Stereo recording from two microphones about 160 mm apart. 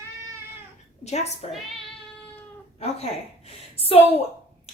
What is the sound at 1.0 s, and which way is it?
Speech, 45° left (ahead or behind).